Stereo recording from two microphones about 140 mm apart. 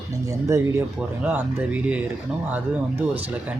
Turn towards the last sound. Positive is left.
turn(degrees=-10)  # may be behind; listen again after turning